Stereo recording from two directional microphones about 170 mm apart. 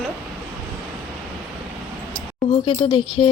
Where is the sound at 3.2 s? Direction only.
30° left (ahead or behind).